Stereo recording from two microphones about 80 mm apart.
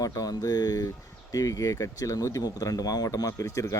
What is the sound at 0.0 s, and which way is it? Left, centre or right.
Speech, left.